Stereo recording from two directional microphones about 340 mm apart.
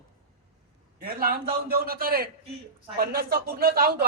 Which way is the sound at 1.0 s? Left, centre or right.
Right.